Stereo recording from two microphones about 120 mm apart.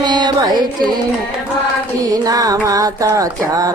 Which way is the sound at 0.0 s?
35° right (ahead or behind).